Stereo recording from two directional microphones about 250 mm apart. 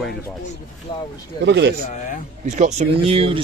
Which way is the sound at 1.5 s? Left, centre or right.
Right.